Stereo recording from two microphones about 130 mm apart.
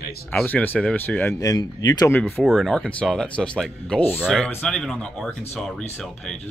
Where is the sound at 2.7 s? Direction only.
10° left (ahead or behind).